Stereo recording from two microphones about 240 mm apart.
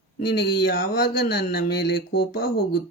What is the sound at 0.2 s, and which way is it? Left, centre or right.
Speech, left.